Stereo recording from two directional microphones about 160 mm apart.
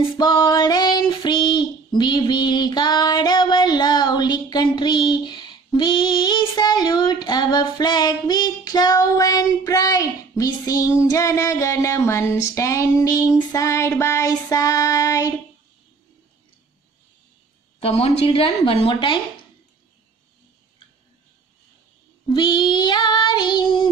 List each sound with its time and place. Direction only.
0.2 s female singing: 25° left (ahead or behind)
12.4 s child singing: 20° left (ahead or behind)
17.7 s a woman's voice: 40° left (ahead or behind)
22.3 s child singing: 30° left (ahead or behind)